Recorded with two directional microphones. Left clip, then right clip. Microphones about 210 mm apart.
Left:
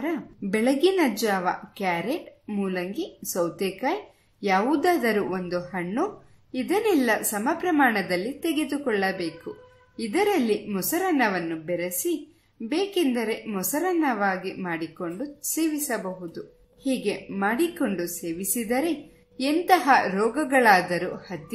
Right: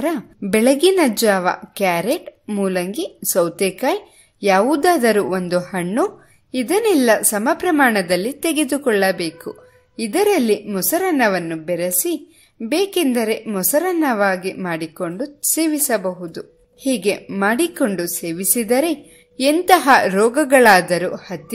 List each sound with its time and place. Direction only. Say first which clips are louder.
0.0 s a woman's voice: right 8 dB; 45° right (ahead or behind)